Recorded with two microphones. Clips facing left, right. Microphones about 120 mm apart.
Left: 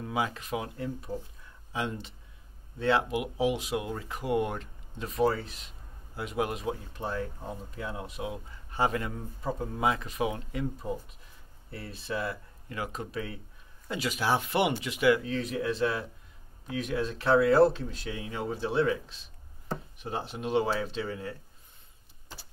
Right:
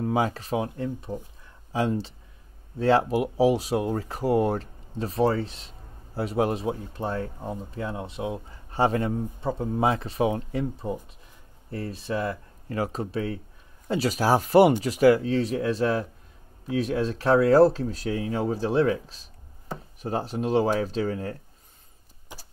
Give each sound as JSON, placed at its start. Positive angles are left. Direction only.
{"t": 0.0, "sound": "speech", "side_deg": -35}